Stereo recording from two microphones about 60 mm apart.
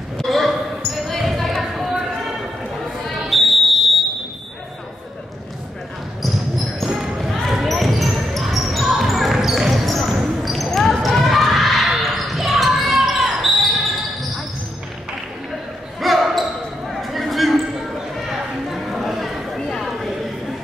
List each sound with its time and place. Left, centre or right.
0.2 s basketball bounce: centre
3.2 s fire alarm: centre
6.5 s basketball bounce: centre
16.0 s basketball bounce: centre
17.0 s a sound: centre